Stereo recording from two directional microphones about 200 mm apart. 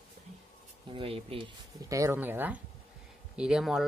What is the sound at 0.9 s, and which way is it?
Speech, 30° right (ahead or behind).